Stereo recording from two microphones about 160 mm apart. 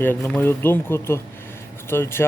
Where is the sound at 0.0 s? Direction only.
15° left (ahead or behind).